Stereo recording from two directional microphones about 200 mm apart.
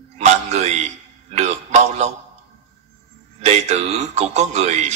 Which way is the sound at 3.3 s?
35° right (ahead or behind).